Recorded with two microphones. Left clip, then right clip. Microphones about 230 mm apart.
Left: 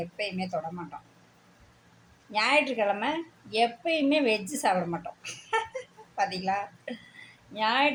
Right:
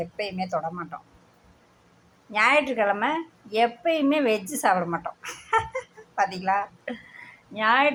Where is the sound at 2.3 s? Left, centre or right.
Centre.